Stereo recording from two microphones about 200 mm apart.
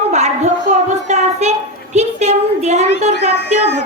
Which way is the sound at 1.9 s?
35° right (ahead or behind).